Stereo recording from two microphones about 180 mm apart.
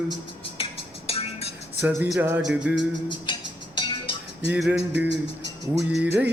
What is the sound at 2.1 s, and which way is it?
Music, 10° right (ahead or behind).